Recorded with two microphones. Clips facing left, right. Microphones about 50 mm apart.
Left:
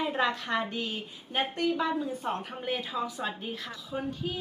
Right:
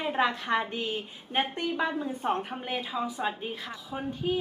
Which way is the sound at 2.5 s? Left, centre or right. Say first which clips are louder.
Even; centre.